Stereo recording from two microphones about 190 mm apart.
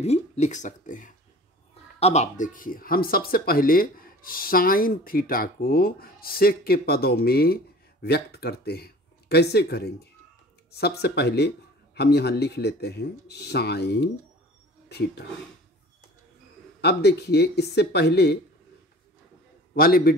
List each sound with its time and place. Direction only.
0.0 s speech: 35° left (ahead or behind); by 15.2 s 60° left (ahead or behind)
16.8 s speech: 60° left (ahead or behind)
19.7 s a man's voice: 50° left (ahead or behind)